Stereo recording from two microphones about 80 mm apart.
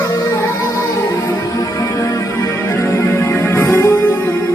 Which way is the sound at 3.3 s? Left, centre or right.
Left.